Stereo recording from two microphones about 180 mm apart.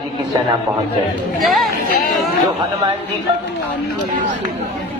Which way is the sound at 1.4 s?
Centre (ahead or behind).